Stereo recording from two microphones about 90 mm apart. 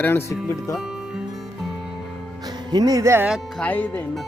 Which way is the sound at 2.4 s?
45° right (ahead or behind).